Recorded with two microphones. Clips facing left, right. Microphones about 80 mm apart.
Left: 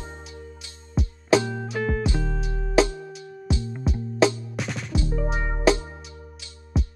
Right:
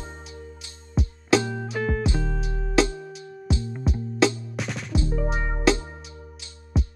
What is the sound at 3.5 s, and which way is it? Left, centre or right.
Music, right.